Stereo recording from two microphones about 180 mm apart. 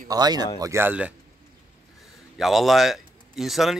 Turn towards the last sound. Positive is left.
turn(degrees=0)  # may be behind; listen again after turning